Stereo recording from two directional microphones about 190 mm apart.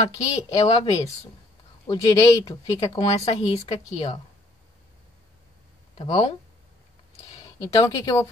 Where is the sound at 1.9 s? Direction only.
20° left (ahead or behind).